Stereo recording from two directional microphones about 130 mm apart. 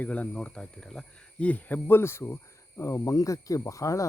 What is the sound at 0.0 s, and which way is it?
Speech, 10° left (ahead or behind).